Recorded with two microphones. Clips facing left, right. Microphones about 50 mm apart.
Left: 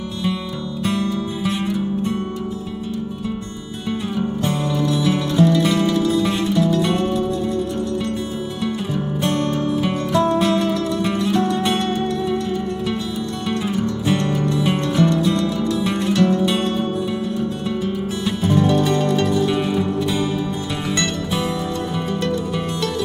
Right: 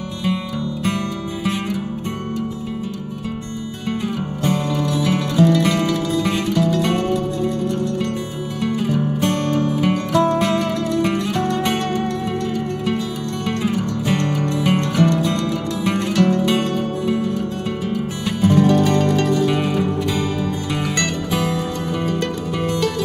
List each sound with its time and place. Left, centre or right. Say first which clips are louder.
0.8 s music: left 5 dB; right
5.0 s music: right 1 dB; right
9.6 s music: right 2 dB; right
13.5 s music: right 1 dB; right
20.9 s music: left 3 dB; right